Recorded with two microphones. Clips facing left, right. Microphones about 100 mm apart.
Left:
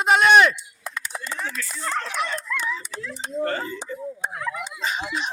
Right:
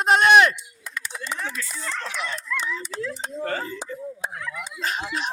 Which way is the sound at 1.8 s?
50° left (ahead or behind).